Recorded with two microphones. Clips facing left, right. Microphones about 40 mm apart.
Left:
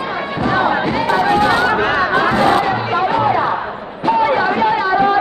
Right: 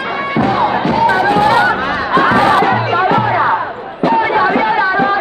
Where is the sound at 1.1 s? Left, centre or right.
Centre.